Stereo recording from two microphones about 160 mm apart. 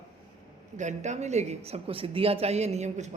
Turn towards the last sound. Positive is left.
turn(degrees=-45)  # may be behind; listen again after turning